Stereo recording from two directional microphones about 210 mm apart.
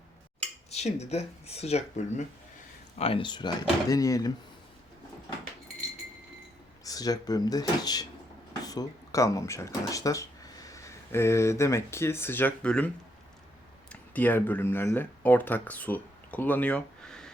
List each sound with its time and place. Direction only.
0.7 s speech: 30° left (ahead or behind)
6.8 s speech: 15° left (ahead or behind)
13.9 s speech: 10° left (ahead or behind)